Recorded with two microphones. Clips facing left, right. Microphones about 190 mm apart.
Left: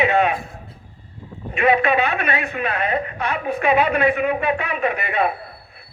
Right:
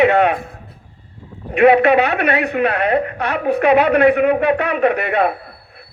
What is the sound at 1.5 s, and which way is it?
A woman's voice, 65° right (ahead or behind).